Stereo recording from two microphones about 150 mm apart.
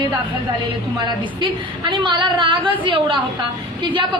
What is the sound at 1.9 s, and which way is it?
A woman's voice, 30° right (ahead or behind).